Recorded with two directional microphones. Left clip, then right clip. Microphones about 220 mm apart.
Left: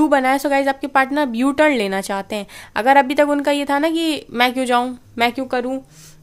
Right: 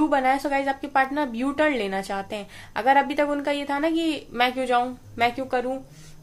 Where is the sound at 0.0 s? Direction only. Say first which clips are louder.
Left 6 dB; 50° left (ahead or behind).